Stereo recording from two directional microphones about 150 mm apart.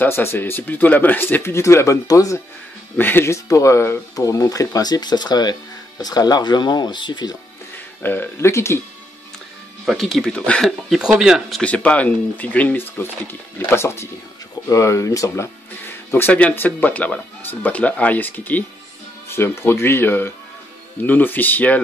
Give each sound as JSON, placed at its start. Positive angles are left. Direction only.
{"t": 0.0, "sound": "speech", "side_deg": 15}
{"t": 8.0, "sound": "speech", "side_deg": 15}
{"t": 9.8, "sound": "speech", "side_deg": 0}
{"t": 11.6, "sound": "speech", "side_deg": 10}